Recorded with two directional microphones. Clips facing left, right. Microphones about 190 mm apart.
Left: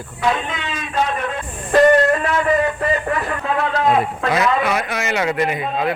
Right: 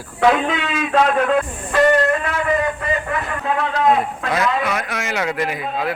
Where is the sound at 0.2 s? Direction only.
85° right.